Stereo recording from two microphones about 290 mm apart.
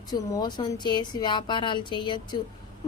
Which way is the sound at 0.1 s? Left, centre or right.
Centre.